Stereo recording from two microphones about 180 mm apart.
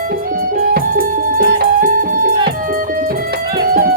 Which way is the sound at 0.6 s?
60° right (ahead or behind).